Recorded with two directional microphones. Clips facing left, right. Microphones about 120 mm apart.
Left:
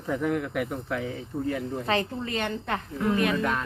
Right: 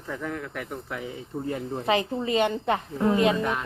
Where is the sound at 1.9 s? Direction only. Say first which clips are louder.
Right 5 dB; 15° right (ahead or behind).